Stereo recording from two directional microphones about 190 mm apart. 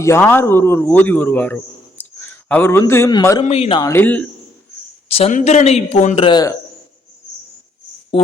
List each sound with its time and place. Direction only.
0.0 s a man's voice: 15° left (ahead or behind)
3.4 s a man's voice: 35° left (ahead or behind)
3.8 s a man's voice: 15° left (ahead or behind)
5.0 s a man's voice: 30° left (ahead or behind)